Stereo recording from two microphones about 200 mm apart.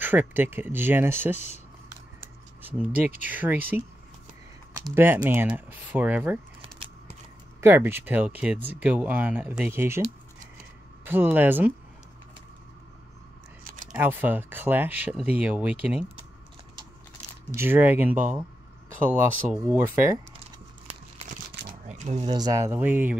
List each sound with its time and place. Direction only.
0.0 s speech: 10° right (ahead or behind)
2.6 s speech: 10° right (ahead or behind)
7.6 s speech: 10° right (ahead or behind)
11.1 s speech: 10° right (ahead or behind)
13.9 s speech: 10° right (ahead or behind)
17.6 s speech: 10° right (ahead or behind)
21.8 s a sound: 35° right (ahead or behind)
22.3 s speech: 15° right (ahead or behind)